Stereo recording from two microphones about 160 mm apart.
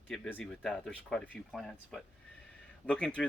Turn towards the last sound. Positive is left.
turn(degrees=5)  # may be behind; listen again after turning